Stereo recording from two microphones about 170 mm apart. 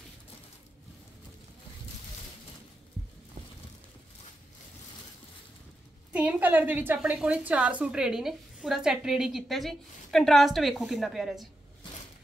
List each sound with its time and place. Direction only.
6.1 s a woman's voice: 10° right (ahead or behind)